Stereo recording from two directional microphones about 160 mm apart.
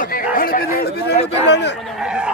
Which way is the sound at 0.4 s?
65° left (ahead or behind).